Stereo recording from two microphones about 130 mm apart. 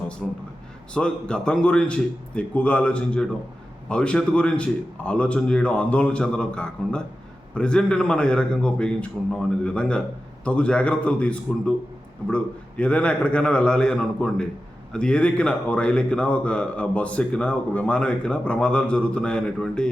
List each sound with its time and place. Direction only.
0.2 s a man's voice: 5° left (ahead or behind)